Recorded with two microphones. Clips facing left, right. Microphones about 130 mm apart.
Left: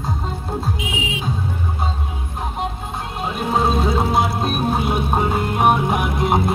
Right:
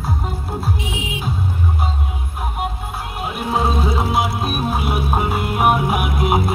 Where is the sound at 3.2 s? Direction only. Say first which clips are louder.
Left 1 dB; 30° left (ahead or behind).